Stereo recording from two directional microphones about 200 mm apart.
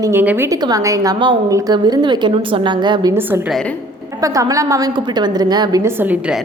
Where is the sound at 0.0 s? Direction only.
10° right (ahead or behind).